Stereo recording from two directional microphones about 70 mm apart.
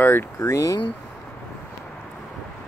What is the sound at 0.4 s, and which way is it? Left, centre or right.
Speech, left.